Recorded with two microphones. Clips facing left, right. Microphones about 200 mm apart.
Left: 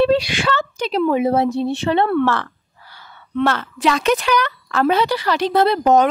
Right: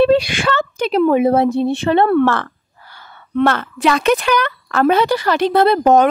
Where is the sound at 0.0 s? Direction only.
55° right (ahead or behind).